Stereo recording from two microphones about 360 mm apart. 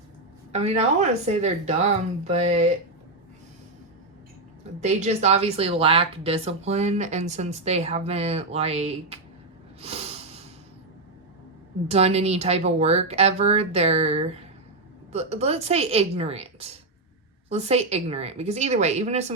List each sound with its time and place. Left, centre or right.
0.5 s speech: centre
4.8 s speech: centre
9.8 s snort: centre
11.9 s speech: centre